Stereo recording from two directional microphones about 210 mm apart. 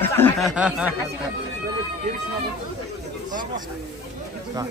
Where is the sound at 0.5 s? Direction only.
5° right (ahead or behind).